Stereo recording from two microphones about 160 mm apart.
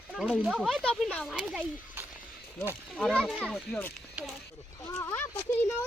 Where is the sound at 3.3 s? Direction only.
5° right (ahead or behind).